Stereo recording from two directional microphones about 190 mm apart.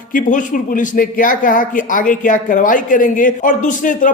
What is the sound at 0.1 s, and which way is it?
A man's voice, 45° left (ahead or behind).